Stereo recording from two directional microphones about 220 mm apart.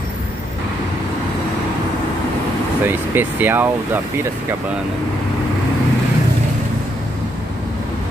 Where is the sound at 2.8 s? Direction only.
10° right (ahead or behind).